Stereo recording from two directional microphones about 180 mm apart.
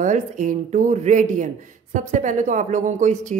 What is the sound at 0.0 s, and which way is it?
Speech, 45° right (ahead or behind).